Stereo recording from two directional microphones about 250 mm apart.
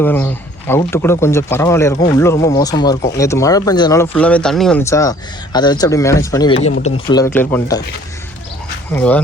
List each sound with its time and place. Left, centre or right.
0.0 s speech: centre
7.3 s speech: centre
8.9 s speech: centre